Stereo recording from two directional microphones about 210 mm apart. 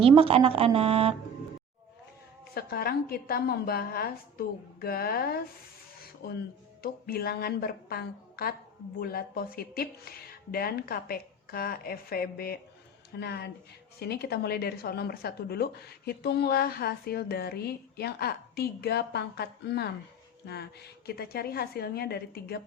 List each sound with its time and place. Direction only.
0.2 s speech: 25° right (ahead or behind)
2.6 s speech: 45° left (ahead or behind)